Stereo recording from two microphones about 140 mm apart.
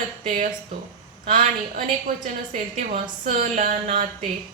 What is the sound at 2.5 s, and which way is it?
Speech, 50° right (ahead or behind).